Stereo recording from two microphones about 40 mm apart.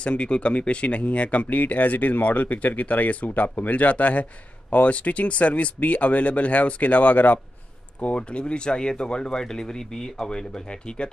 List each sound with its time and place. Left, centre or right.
0.0 s speech: left
8.0 s speech: left